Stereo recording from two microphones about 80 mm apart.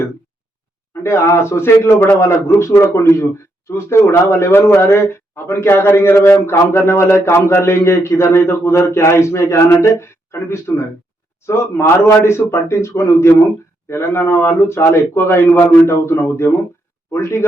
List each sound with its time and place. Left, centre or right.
1.0 s a man's voice: left